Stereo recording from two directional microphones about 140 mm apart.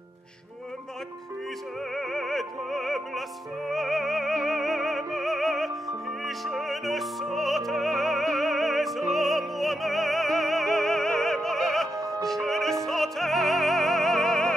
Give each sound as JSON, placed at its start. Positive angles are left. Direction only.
{"t": 2.0, "sound": "music", "side_deg": 0}